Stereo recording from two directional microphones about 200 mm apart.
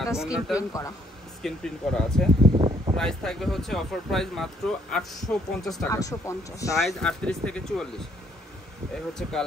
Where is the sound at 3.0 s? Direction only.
Centre (ahead or behind).